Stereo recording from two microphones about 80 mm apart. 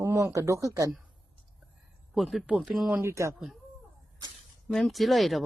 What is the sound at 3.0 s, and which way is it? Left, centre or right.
Speech, right.